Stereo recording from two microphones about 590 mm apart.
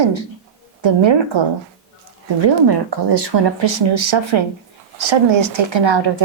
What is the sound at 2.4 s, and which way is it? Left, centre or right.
Speech, right.